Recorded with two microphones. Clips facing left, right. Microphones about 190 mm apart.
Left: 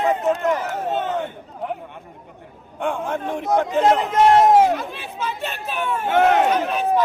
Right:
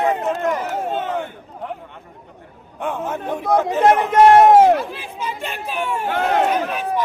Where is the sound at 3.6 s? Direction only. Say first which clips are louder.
Right 3 dB; 65° right (ahead or behind).